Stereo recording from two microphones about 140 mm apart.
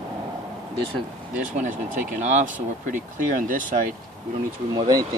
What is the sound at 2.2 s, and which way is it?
Speech, 65° right (ahead or behind).